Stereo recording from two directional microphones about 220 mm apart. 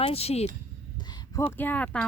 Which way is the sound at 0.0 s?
25° left (ahead or behind).